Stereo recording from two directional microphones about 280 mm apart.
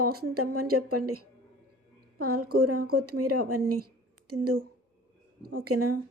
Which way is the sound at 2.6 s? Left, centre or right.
Right.